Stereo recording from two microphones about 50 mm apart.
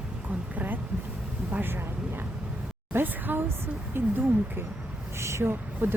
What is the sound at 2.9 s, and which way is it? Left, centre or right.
Speech, right.